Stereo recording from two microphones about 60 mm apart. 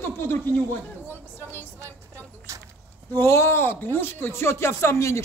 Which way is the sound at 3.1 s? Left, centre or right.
Left.